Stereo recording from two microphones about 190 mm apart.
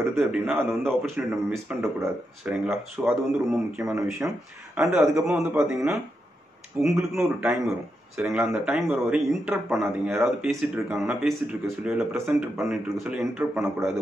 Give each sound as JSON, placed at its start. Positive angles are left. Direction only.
{"t": 0.2, "sound": "a man's voice", "side_deg": -5}
{"t": 1.1, "sound": "speech", "side_deg": -10}
{"t": 2.5, "sound": "a man's voice", "side_deg": -5}
{"t": 4.2, "sound": "a man's voice", "side_deg": -15}